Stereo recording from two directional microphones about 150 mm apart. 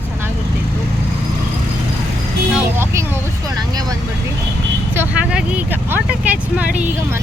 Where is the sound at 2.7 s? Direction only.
15° right (ahead or behind).